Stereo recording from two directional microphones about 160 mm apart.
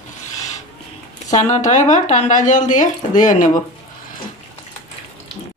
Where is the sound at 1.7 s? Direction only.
50° left (ahead or behind).